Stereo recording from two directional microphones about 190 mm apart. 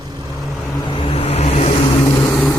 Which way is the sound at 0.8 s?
25° left (ahead or behind).